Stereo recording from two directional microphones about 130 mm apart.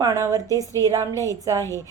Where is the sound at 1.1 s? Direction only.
20° left (ahead or behind).